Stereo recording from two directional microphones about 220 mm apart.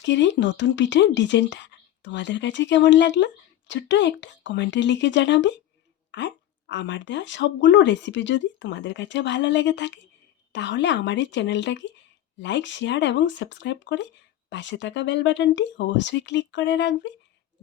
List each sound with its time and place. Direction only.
0.0 s speech: 55° left (ahead or behind)